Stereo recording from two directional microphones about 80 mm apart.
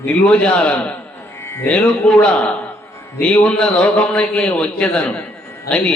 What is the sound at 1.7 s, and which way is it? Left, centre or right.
A man's voice, centre.